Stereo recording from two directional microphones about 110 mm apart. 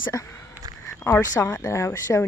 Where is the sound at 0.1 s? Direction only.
25° left (ahead or behind).